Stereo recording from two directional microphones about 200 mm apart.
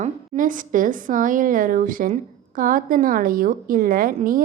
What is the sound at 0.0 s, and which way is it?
A woman's voice, 40° right (ahead or behind).